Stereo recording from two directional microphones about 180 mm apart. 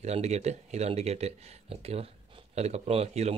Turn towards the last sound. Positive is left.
turn(degrees=-35)  # may be behind; listen again after turning